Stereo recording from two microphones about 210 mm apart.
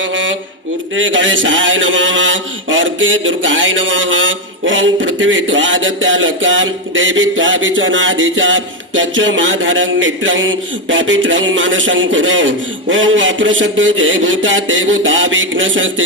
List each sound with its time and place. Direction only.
0.1 s mantra: 65° right (ahead or behind)